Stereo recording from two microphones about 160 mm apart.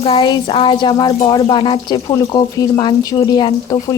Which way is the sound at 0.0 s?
30° left (ahead or behind).